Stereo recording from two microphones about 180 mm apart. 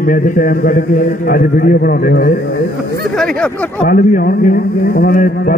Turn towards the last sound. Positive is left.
turn(degrees=50)  # may be behind; listen again after turning